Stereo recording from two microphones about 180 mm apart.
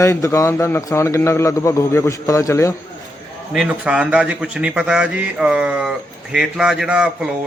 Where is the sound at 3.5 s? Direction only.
5° right (ahead or behind).